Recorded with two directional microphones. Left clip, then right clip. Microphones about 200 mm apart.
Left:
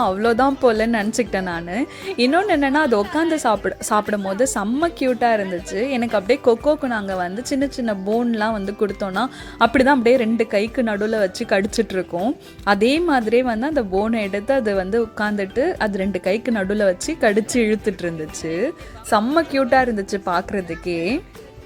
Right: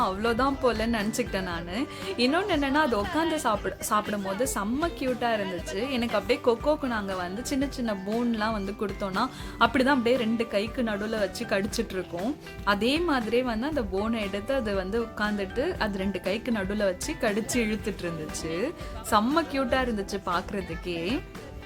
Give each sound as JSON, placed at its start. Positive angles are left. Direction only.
{"t": 0.0, "sound": "speech", "side_deg": 30}